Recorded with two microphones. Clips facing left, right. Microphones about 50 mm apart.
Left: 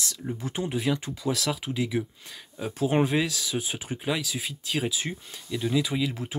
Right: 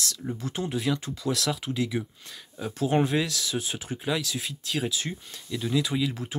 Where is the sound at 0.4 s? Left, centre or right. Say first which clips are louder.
Left 1 dB; centre.